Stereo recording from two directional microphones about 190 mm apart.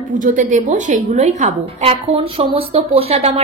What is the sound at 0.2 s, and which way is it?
A woman's voice, 40° right (ahead or behind).